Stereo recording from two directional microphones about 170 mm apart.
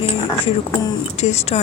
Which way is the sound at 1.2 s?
40° left (ahead or behind).